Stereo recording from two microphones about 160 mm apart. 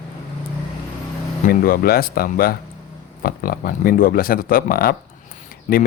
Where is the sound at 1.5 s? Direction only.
65° left (ahead or behind).